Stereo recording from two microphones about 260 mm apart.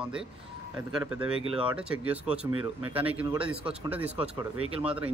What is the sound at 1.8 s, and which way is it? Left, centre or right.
Speech, centre.